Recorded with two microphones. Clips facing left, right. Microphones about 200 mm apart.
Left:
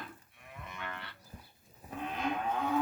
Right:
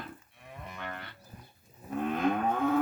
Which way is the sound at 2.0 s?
55° right (ahead or behind).